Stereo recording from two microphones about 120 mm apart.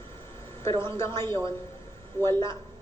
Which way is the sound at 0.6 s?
20° left (ahead or behind).